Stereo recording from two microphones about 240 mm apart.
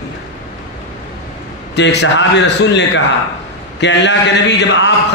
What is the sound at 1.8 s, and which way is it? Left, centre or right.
A man's voice, left.